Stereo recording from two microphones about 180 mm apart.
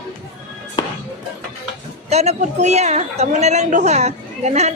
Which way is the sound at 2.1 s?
35° right (ahead or behind).